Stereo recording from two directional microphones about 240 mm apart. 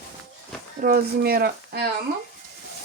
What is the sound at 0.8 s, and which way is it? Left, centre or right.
Speech, right.